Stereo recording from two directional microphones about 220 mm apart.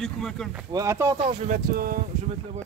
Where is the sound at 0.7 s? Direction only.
15° right (ahead or behind).